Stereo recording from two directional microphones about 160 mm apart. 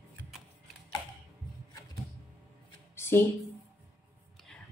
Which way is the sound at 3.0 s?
15° left (ahead or behind).